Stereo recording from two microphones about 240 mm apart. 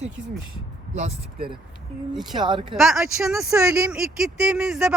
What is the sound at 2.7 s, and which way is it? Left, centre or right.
Speech, centre.